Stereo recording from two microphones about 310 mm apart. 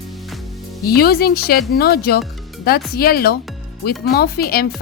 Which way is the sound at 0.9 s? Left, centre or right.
Left.